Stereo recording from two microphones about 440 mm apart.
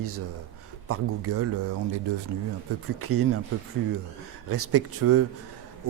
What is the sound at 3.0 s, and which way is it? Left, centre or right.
Speech, right.